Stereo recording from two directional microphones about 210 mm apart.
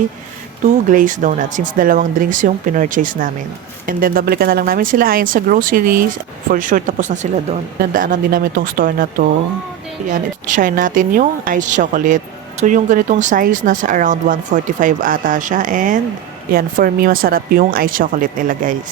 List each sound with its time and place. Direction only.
0.6 s speech: 35° right (ahead or behind)